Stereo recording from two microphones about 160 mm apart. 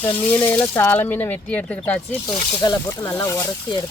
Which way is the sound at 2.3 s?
30° left (ahead or behind).